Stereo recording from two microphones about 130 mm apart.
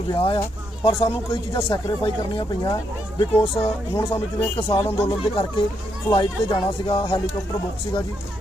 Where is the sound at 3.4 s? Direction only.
45° left (ahead or behind).